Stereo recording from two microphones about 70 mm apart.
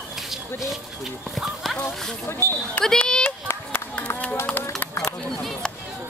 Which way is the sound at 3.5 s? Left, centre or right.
Left.